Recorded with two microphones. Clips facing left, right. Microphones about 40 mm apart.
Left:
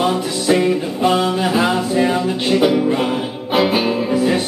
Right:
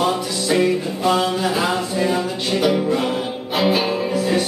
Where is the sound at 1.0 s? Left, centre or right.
Left.